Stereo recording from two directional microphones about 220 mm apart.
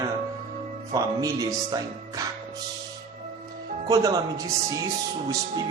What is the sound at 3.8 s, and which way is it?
Speech, 15° right (ahead or behind).